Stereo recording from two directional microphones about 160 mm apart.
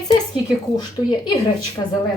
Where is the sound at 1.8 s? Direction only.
20° left (ahead or behind).